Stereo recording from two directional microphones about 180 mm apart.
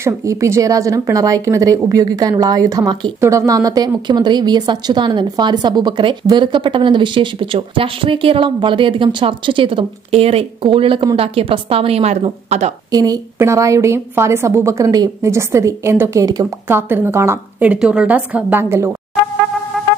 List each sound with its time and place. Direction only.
0.0 s a woman's voice: 15° right (ahead or behind); by 12.7 s 35° right (ahead or behind)
12.9 s a woman's voice: 20° right (ahead or behind)